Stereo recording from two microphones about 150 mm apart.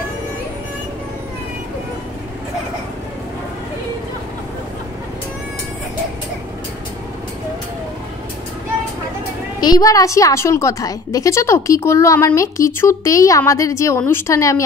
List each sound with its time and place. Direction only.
9.6 s a woman's voice: 25° left (ahead or behind)